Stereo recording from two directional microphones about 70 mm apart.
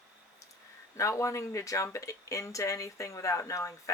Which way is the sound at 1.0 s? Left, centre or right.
Left.